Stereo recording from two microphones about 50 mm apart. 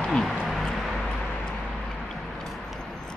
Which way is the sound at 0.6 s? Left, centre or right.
Centre.